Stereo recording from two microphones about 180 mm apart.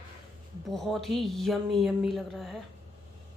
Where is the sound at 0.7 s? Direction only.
Centre (ahead or behind).